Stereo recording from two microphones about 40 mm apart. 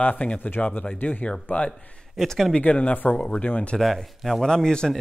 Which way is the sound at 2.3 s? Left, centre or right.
Centre.